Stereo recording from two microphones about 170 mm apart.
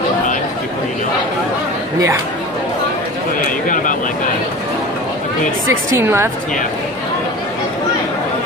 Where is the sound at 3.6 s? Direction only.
50° left (ahead or behind).